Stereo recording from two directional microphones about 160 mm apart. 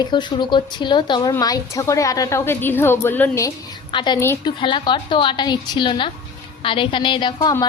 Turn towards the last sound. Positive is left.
turn(degrees=25)  # may be behind; listen again after turning